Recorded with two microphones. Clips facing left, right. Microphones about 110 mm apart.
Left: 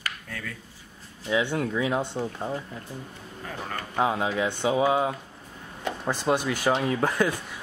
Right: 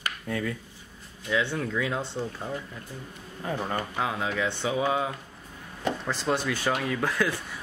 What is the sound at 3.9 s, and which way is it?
Speech, 20° left (ahead or behind).